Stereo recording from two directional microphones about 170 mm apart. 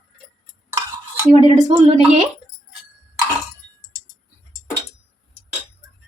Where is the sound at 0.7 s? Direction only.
20° right (ahead or behind).